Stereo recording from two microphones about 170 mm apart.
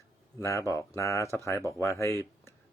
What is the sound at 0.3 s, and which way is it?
Speech, 15° left (ahead or behind).